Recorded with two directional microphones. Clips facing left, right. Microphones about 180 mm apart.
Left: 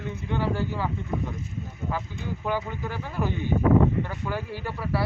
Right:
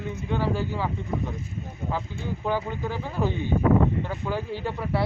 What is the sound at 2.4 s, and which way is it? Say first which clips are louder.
Speech: right 2 dB; 15° right (ahead or behind).